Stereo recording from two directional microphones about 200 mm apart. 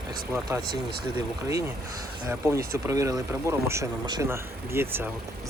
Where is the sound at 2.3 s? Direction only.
15° right (ahead or behind).